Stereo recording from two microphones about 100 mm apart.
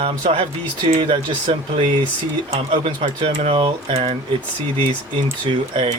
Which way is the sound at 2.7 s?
60° right (ahead or behind).